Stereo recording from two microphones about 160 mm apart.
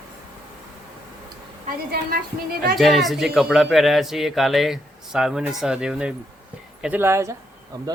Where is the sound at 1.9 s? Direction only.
75° right (ahead or behind).